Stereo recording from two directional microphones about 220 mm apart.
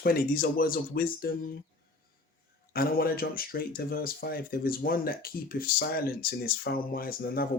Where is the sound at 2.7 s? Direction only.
40° left (ahead or behind).